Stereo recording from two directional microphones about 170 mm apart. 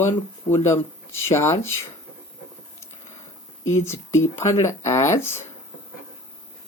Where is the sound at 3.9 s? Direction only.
15° left (ahead or behind).